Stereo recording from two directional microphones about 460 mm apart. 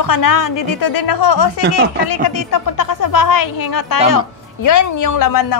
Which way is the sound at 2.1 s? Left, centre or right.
Left.